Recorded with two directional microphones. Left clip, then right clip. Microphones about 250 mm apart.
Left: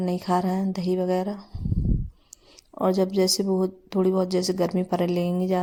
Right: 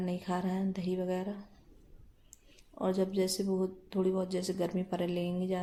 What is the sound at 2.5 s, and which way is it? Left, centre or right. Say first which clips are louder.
Speech: left 10 dB; left.